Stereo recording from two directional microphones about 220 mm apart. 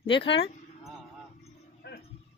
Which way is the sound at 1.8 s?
50° left (ahead or behind).